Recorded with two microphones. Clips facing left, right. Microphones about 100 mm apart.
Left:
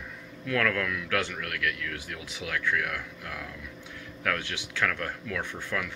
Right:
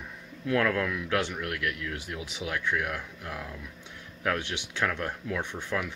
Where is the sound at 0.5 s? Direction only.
25° right (ahead or behind).